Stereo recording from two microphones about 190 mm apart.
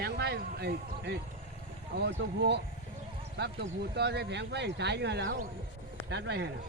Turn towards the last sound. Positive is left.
turn(degrees=-65)  # may be behind; listen again after turning